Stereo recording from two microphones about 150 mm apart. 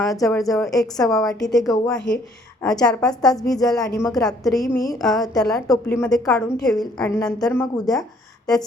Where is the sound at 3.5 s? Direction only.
25° left (ahead or behind).